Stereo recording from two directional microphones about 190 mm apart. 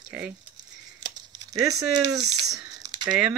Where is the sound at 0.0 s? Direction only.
5° right (ahead or behind).